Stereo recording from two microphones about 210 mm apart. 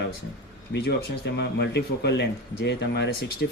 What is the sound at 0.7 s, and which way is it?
Speech, 55° left (ahead or behind).